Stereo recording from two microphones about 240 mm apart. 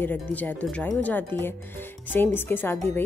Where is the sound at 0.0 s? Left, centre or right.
Centre.